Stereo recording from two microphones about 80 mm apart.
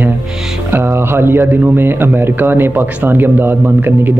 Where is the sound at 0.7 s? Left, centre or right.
Right.